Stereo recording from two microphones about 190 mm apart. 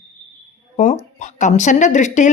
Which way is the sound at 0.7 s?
40° left (ahead or behind).